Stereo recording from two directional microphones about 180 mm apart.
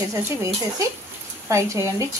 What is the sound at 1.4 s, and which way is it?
Speech, 15° right (ahead or behind).